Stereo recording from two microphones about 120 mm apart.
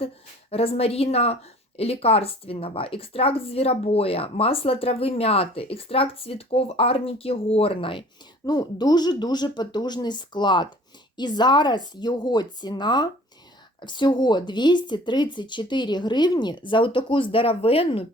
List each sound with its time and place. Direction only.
0.5 s speech: 55° left (ahead or behind)
8.4 s speech: 35° left (ahead or behind); by 18.0 s 55° left (ahead or behind)